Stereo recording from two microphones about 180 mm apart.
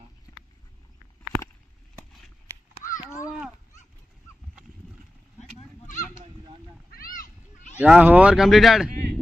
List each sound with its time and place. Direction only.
5.4 s honk: 40° left (ahead or behind)
6.9 s a sound: 50° left (ahead or behind)
7.8 s speech: 5° right (ahead or behind)
8.9 s speech: 60° right (ahead or behind)